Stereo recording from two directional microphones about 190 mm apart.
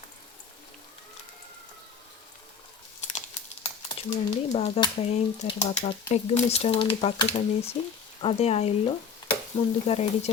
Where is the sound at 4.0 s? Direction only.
30° left (ahead or behind).